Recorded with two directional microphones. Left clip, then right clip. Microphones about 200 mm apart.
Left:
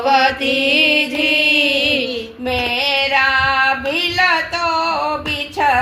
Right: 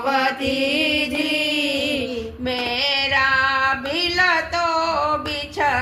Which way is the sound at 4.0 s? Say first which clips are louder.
Left 2 dB; 40° left (ahead or behind).